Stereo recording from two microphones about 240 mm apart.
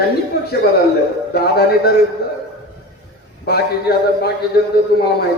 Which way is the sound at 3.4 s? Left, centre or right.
Left.